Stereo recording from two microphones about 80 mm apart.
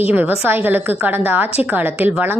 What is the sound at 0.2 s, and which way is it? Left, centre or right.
A woman's voice, right.